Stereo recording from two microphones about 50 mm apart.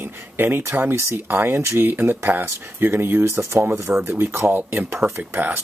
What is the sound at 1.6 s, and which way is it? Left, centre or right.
Speech, right.